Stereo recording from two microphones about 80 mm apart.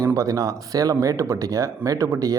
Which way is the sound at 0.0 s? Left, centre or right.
Right.